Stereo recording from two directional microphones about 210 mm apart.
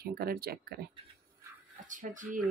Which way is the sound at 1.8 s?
40° right (ahead or behind).